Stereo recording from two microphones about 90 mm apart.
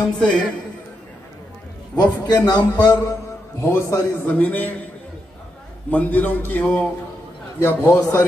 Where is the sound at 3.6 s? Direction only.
35° left (ahead or behind).